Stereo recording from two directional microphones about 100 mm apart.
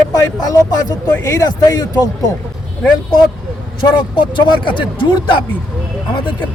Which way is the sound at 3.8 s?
50° left (ahead or behind).